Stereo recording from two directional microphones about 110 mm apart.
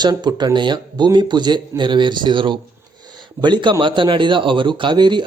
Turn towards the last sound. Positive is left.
turn(degrees=-45)  # may be behind; listen again after turning